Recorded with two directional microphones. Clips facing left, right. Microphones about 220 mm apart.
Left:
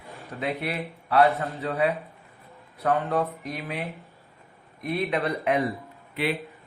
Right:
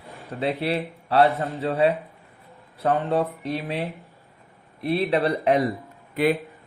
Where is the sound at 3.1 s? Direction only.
30° right (ahead or behind).